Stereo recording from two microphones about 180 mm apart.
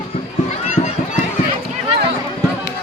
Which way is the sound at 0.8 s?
35° left (ahead or behind).